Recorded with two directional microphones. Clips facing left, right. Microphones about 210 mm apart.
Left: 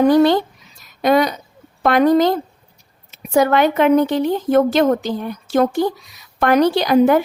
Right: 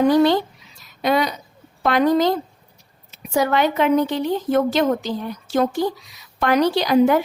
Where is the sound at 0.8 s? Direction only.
50° left (ahead or behind).